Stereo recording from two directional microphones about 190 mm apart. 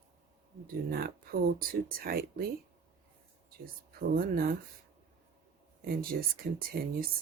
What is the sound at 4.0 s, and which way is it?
Speech, 50° right (ahead or behind).